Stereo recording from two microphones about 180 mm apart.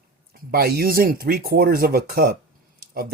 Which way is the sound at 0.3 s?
55° right (ahead or behind).